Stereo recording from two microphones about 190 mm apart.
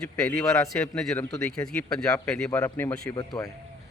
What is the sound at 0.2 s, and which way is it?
A man's voice, 5° left (ahead or behind).